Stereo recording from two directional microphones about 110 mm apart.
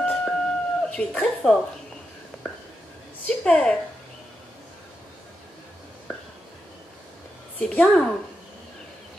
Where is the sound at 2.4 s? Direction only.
10° left (ahead or behind).